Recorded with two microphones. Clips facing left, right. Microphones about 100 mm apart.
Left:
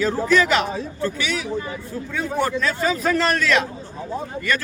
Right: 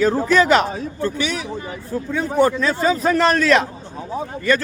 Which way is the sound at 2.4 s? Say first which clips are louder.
Right 5 dB; 25° right (ahead or behind).